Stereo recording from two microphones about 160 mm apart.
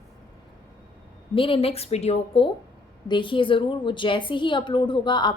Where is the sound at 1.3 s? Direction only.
35° left (ahead or behind).